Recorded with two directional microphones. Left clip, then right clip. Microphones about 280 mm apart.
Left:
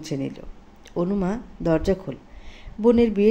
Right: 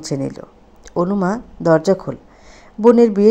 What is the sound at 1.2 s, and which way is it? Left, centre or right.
Speech, centre.